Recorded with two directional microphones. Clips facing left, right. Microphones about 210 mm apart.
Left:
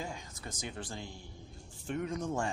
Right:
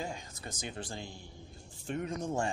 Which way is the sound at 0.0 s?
30° right (ahead or behind).